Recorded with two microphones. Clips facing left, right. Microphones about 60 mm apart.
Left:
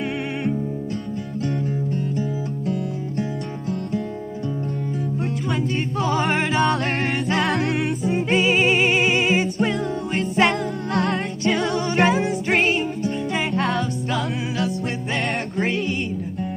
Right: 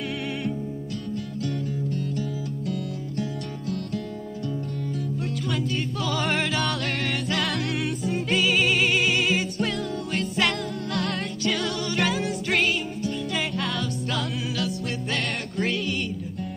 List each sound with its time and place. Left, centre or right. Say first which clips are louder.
1.4 s music: left 5 dB; left
5.9 s music: left 6 dB; left
8.0 s music: left 4 dB; left
15.5 s music: left 1 dB; left